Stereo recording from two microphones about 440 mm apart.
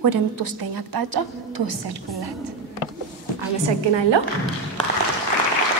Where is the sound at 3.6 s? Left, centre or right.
Right.